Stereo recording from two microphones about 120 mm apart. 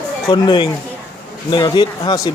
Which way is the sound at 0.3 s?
40° left (ahead or behind).